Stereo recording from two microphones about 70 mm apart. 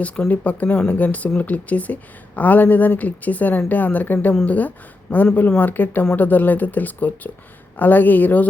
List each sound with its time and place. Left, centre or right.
0.3 s speech: left